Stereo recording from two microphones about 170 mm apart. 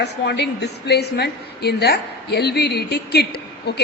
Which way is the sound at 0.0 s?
75° left (ahead or behind).